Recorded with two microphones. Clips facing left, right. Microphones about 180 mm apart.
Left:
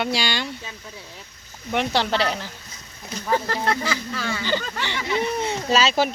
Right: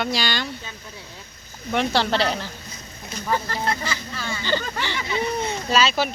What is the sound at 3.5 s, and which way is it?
Speech, 90° left.